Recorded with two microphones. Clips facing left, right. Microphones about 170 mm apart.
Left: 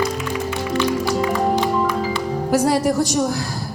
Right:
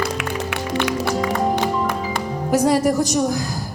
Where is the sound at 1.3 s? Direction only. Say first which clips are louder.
Left 1 dB; 55° right (ahead or behind).